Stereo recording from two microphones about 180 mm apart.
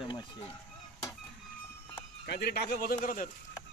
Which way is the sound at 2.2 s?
60° left (ahead or behind).